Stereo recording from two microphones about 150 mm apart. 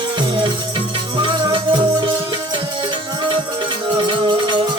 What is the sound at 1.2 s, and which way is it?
Music, 30° right (ahead or behind).